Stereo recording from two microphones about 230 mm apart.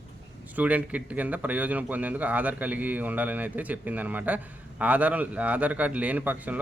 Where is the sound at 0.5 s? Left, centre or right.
Centre.